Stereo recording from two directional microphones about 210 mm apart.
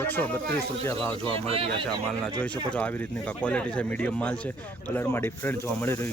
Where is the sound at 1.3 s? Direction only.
25° right (ahead or behind).